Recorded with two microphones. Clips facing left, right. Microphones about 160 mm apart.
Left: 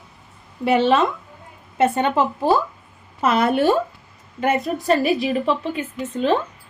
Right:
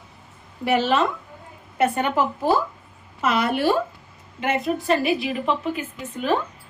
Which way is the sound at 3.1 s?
40° left (ahead or behind).